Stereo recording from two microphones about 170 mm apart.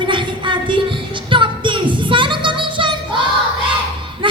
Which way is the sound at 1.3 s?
30° right (ahead or behind).